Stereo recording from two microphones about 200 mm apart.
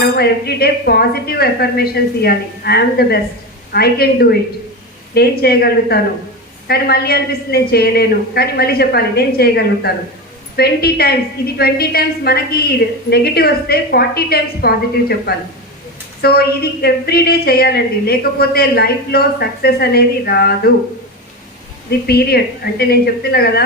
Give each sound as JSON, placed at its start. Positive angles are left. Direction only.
{"t": 0.2, "sound": "a woman's voice", "side_deg": 50}
{"t": 21.8, "sound": "a woman's voice", "side_deg": 50}